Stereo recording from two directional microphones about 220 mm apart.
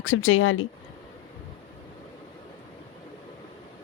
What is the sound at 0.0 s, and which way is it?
Speech, 65° left (ahead or behind).